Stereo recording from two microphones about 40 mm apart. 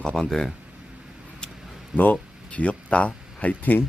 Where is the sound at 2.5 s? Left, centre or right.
Left.